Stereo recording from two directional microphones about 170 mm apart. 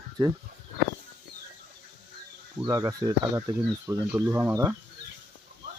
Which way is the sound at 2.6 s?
20° right (ahead or behind).